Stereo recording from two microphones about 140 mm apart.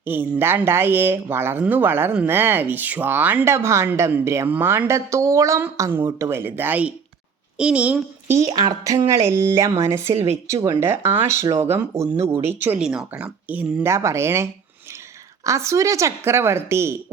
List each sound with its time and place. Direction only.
0.0 s speech: 15° right (ahead or behind)
8.8 s a woman's voice: 25° right (ahead or behind)
13.8 s a woman's voice: 20° right (ahead or behind)
15.4 s a woman's voice: 20° right (ahead or behind)